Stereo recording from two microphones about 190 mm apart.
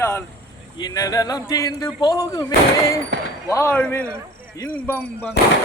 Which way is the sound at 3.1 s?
70° right (ahead or behind).